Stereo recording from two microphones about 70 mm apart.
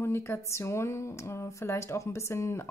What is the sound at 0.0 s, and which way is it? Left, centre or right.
Speech, left.